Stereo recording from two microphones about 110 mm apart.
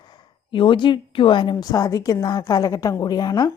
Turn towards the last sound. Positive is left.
turn(degrees=40)  # may be behind; listen again after turning